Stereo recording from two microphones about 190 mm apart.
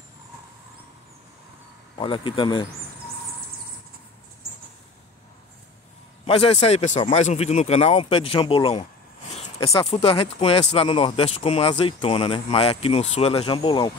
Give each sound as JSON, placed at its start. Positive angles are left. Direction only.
{"t": 2.0, "sound": "speech", "side_deg": 25}
{"t": 6.2, "sound": "speech", "side_deg": 30}